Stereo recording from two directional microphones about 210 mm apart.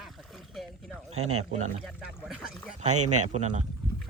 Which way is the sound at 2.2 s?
5° right (ahead or behind).